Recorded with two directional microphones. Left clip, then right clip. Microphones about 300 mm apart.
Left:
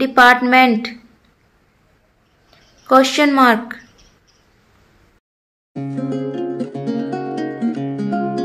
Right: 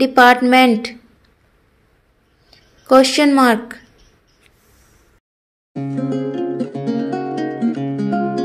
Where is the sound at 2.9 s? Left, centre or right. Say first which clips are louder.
Right 1 dB; centre.